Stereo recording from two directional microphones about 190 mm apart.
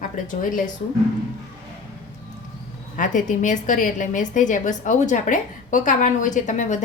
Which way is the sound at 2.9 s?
45° left (ahead or behind).